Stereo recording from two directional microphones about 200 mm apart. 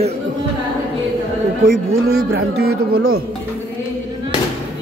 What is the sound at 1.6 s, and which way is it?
Speech, 90° right.